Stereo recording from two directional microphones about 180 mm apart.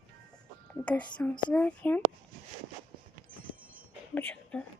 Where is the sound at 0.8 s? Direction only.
5° left (ahead or behind).